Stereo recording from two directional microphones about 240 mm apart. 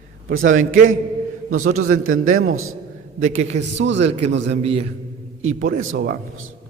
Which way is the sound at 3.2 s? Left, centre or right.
Right.